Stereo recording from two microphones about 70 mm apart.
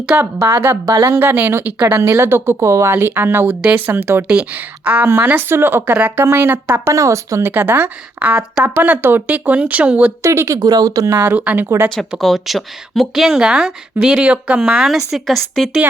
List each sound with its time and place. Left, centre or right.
0.2 s speech: right
2.0 s speech: right
2.9 s speech: right
3.5 s speech: centre
3.9 s speech: right
4.3 s speech: centre
5.0 s speech: right
6.9 s a woman's voice: right
7.5 s speech: right
8.3 s speech: centre
10.2 s a woman's voice: right
10.6 s speech: right
11.3 s speech: centre
11.9 s speech: centre